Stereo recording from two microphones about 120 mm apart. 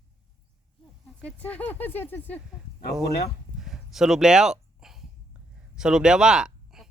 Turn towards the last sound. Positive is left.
turn(degrees=-5)  # may be behind; listen again after turning